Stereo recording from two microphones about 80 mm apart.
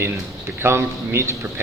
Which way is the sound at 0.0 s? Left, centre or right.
Right.